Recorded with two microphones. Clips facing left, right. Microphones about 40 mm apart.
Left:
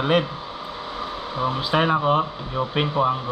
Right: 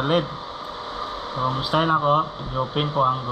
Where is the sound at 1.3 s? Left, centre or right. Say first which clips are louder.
Even; left.